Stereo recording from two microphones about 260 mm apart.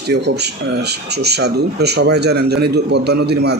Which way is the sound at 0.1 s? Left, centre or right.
Right.